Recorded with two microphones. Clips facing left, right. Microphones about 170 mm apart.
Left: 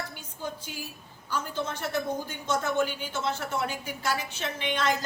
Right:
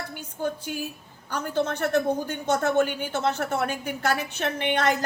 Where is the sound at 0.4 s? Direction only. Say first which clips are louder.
Right 8 dB; 55° right (ahead or behind).